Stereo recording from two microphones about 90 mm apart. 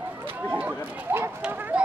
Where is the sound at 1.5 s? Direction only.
20° right (ahead or behind).